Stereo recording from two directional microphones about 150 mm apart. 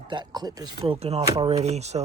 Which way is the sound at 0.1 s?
30° right (ahead or behind).